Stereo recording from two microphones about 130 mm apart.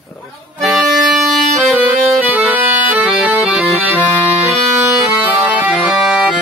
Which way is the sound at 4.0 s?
15° left (ahead or behind).